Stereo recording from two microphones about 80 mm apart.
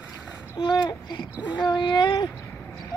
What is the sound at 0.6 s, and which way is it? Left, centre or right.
Babbling, left.